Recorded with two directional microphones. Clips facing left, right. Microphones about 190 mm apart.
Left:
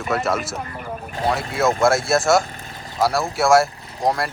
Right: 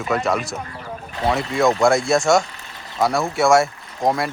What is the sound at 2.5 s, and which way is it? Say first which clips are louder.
Vehicle: left 3 dB; 45° left (ahead or behind).